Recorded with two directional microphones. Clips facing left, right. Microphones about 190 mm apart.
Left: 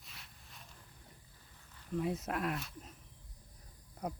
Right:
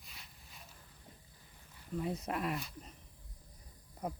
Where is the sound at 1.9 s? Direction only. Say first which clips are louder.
Left 1 dB; centre (ahead or behind).